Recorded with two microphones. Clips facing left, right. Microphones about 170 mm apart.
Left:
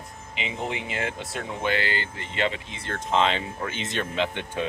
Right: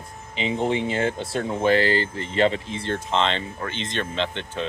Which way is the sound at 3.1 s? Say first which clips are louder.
Left 2 dB; 5° left (ahead or behind).